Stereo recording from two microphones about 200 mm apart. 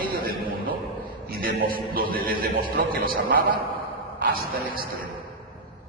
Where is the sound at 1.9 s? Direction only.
45° right (ahead or behind).